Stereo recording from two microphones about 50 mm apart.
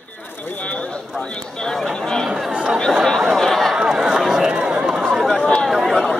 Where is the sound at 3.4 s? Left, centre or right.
Centre.